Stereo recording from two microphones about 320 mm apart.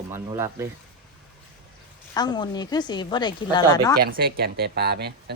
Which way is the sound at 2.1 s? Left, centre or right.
Centre.